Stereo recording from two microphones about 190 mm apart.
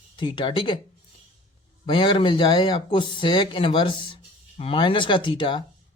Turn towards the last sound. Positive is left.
turn(degrees=25)  # may be behind; listen again after turning